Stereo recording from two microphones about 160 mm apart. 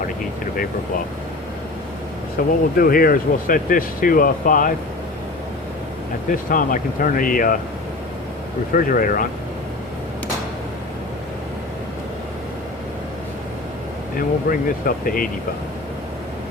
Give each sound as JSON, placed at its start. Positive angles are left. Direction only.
{"t": 2.4, "sound": "speech", "side_deg": 60}
{"t": 6.3, "sound": "speech", "side_deg": 60}
{"t": 8.7, "sound": "speech", "side_deg": 60}
{"t": 14.2, "sound": "speech", "side_deg": 60}